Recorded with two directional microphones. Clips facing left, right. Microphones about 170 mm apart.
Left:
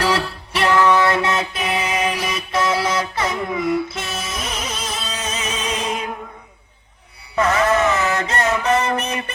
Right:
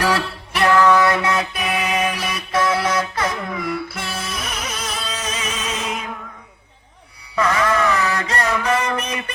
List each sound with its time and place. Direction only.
0.0 s music: 20° left (ahead or behind)
7.3 s music: 30° left (ahead or behind)